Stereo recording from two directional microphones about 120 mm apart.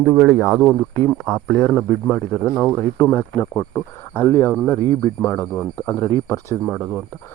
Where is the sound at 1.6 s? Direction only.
25° left (ahead or behind).